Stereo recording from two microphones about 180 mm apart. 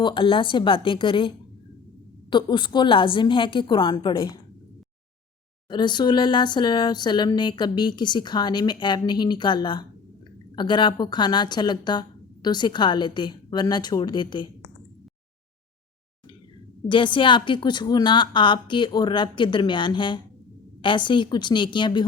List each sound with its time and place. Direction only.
0.0 s speech: 30° left (ahead or behind)
2.3 s speech: 25° left (ahead or behind)
5.6 s speech: 25° left (ahead or behind)
16.9 s speech: 25° left (ahead or behind)